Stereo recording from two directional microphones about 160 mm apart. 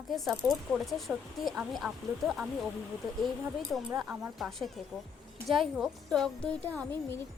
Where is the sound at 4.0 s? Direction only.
5° right (ahead or behind).